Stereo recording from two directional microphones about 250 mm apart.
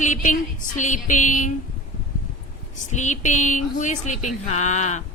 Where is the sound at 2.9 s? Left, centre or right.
Left.